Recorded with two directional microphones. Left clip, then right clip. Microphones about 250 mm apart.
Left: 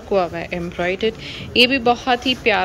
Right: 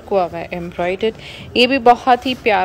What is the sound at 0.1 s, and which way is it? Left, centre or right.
A woman's voice, centre.